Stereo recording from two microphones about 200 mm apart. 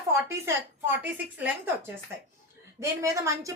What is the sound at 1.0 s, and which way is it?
Speech, 10° right (ahead or behind).